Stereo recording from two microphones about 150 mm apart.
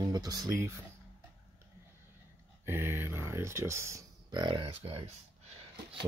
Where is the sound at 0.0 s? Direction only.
25° right (ahead or behind).